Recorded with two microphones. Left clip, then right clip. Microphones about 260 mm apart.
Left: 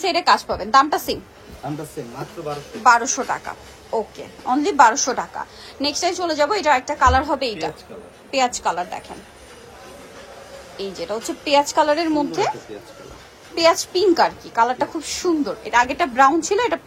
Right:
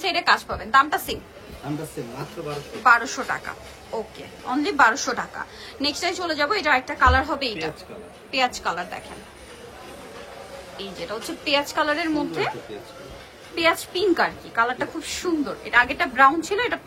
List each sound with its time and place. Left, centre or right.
0.0 s a woman's voice: centre
2.8 s a woman's voice: centre
10.8 s a woman's voice: centre
13.6 s a woman's voice: centre